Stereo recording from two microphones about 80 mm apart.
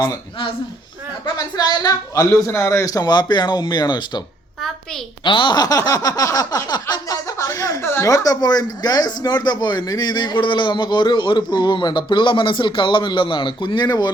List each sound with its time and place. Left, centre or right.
1.2 s speech: left
5.2 s speech: left
5.6 s a sound: left
6.9 s chuckle: left
7.8 s a sound: left
8.0 s speech: left
9.8 s a man's voice: left